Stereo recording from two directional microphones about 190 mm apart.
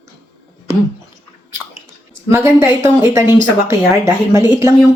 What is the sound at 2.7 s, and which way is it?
Speech, 15° right (ahead or behind).